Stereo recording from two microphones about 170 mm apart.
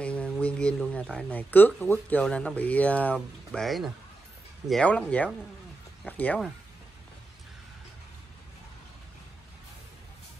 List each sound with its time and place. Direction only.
0.0 s speech: 5° left (ahead or behind)